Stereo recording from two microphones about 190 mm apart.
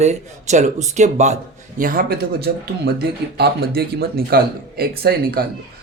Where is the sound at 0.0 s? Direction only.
35° right (ahead or behind).